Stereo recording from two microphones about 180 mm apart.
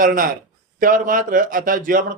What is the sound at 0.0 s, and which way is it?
Speech, 50° right (ahead or behind).